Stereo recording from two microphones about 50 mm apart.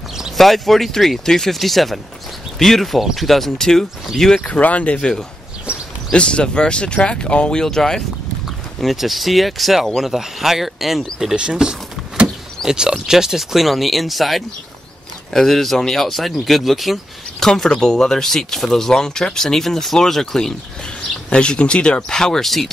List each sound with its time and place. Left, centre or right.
0.4 s speech: centre
4.4 s speech: left
4.9 s speech: centre
5.7 s a sound: right
6.1 s speech: centre
7.6 s speech: centre
8.8 s speech: centre
11.3 s speech: centre
17.5 s speech: centre
21.3 s speech: left; by 22.7 s centre